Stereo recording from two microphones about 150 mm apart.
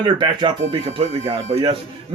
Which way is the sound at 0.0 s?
30° right (ahead or behind).